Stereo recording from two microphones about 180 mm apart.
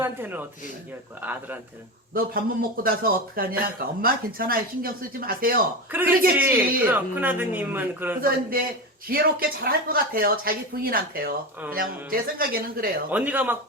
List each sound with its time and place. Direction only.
0.0 s speech: 10° right (ahead or behind)
2.1 s speech: 55° right (ahead or behind)
5.9 s speech: 10° right (ahead or behind)
8.2 s a man's voice: 55° right (ahead or behind)
13.1 s speech: 10° right (ahead or behind)